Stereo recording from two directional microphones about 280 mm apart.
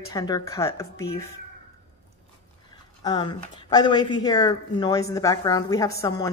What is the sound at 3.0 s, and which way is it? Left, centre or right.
A woman's voice, centre.